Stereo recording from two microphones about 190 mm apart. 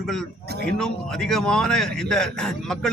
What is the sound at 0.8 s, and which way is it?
Speech, 5° left (ahead or behind).